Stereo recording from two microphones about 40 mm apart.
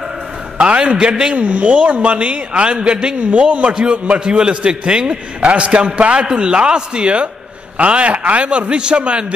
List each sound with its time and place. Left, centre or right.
0.6 s a man's voice: right
0.9 s a man's voice: centre
1.3 s a woman's voice: right